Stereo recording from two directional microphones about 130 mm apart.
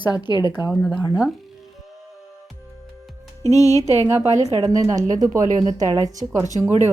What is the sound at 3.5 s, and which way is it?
Speech, 25° left (ahead or behind).